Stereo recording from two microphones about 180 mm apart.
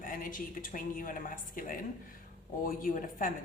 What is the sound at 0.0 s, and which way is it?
A woman's voice, 50° left (ahead or behind).